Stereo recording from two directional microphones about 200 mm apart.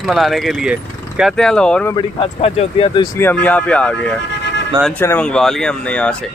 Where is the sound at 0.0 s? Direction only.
Centre (ahead or behind).